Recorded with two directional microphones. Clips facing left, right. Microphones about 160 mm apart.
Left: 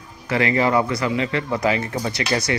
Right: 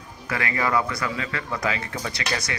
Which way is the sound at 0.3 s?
25° left (ahead or behind).